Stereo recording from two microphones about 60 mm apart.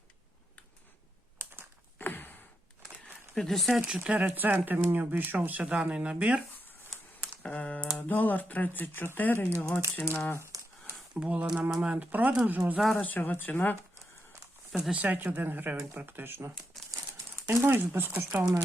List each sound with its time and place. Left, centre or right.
2.0 s sigh: left
3.3 s speech: centre
3.8 s speech: centre
4.3 s speech: right
7.4 s computer keyboard: centre
7.9 s speech: left
10.5 s a sound: right
11.1 s speech: centre
13.0 s speech: left
15.0 s speech: right
16.9 s crumpling: right
17.7 s speech: right